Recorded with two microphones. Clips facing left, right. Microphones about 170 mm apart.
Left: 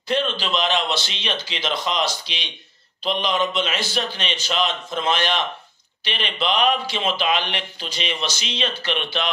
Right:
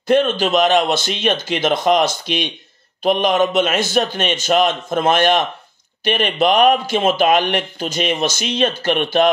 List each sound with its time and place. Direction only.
0.1 s speech: 50° right (ahead or behind)